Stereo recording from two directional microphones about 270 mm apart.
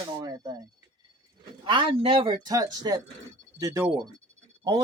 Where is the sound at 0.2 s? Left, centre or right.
Centre.